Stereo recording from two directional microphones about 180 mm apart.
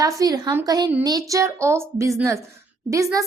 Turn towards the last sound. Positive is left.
turn(degrees=-15)  # may be behind; listen again after turning